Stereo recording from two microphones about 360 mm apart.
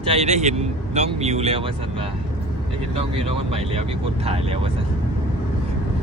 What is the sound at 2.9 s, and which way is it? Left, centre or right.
Speech, centre.